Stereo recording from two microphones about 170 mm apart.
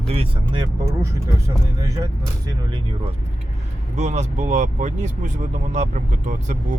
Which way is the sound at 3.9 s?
45° right (ahead or behind).